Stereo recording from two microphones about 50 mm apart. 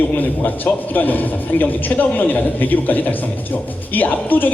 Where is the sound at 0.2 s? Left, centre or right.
Left.